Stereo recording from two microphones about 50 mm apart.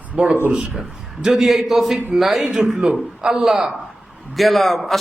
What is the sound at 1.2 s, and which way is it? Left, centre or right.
A man's voice, centre.